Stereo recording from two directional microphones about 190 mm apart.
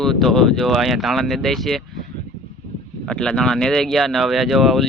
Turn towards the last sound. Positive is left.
turn(degrees=0)  # may be behind; listen again after turning